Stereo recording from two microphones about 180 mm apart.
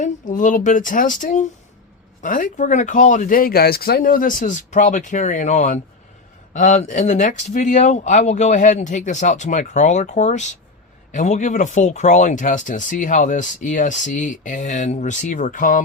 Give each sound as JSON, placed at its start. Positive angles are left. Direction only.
{"t": 0.0, "sound": "speech", "side_deg": 45}